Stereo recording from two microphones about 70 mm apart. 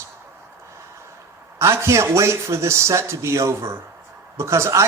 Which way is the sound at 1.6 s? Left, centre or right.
Right.